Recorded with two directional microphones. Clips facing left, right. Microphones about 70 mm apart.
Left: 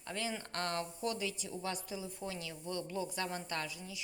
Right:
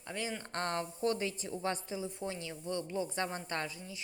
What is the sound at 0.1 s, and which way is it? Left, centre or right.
A woman's voice, centre.